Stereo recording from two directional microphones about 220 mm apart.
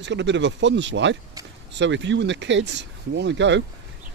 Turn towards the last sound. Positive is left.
turn(degrees=-55)  # may be behind; listen again after turning